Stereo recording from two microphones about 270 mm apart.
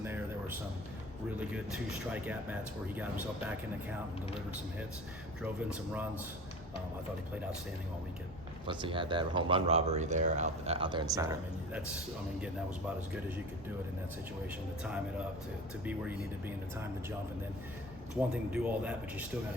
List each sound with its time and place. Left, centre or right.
0.0 s a sound: centre
1.4 s speech: centre
5.4 s speech: centre
8.6 s speech: centre
15.8 s speech: centre
18.5 s speech: centre